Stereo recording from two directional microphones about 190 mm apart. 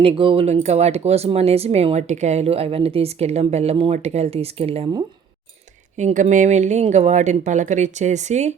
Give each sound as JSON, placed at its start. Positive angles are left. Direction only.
{"t": 0.0, "sound": "speech", "side_deg": -30}